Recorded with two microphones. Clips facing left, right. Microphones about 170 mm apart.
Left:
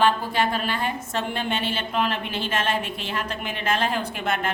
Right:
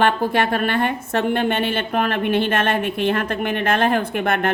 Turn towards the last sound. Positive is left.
turn(degrees=-55)  # may be behind; listen again after turning